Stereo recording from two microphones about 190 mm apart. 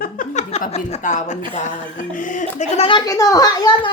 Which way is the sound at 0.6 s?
40° left (ahead or behind).